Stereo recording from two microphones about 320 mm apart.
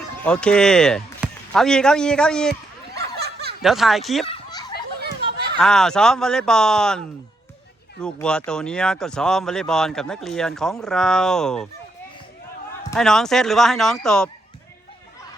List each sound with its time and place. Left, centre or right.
0.2 s speech: centre
2.9 s a sound: right
3.6 s speech: centre
5.5 s speech: centre
8.0 s speech: centre
12.9 s speech: centre